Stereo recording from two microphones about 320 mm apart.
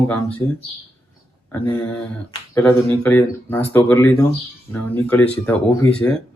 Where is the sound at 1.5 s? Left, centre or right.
Centre.